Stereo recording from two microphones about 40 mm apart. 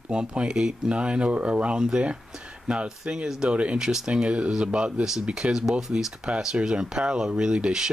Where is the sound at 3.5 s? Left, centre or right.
Right.